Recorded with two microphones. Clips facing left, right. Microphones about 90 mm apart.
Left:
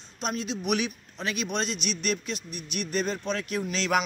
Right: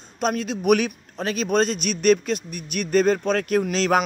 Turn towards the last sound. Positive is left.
turn(degrees=-40)  # may be behind; listen again after turning